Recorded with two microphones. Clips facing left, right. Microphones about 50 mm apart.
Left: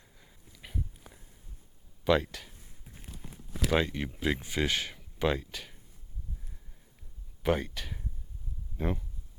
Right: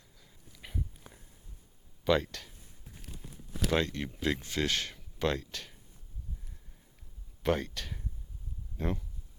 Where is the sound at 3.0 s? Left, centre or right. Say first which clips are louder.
Left 1 dB; left.